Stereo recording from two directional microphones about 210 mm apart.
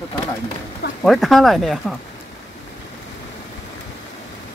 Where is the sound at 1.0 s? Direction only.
Centre (ahead or behind).